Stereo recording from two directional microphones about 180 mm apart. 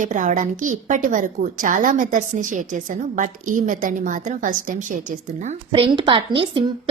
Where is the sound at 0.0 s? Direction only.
45° right (ahead or behind).